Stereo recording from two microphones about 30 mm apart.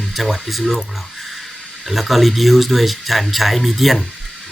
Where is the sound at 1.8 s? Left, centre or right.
Centre.